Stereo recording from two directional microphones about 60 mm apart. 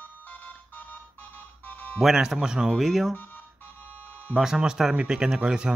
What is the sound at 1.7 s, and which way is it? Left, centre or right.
Music, left.